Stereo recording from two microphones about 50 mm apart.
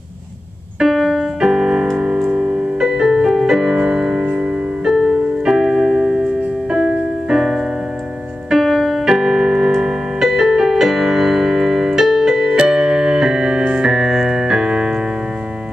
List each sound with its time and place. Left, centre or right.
0.7 s keyboard: centre
2.3 s music: centre
4.8 s music: centre
5.1 s music: centre
7.3 s keyboard: centre
8.5 s music: centre
12.5 s keyboard: centre
14.2 s piano: centre